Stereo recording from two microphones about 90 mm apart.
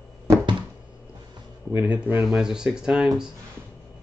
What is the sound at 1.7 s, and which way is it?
Speech, 25° right (ahead or behind).